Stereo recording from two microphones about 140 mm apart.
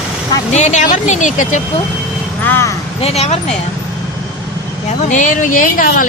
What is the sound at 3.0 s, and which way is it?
Speech, 50° left (ahead or behind).